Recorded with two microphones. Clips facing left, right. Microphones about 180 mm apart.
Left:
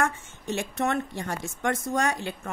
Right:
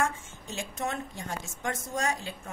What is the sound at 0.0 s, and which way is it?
A woman's voice, 65° left (ahead or behind).